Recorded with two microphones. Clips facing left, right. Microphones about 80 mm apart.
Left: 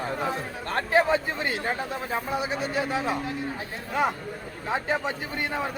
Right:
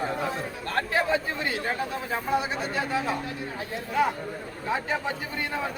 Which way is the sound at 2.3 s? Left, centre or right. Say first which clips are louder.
Right 2 dB; centre.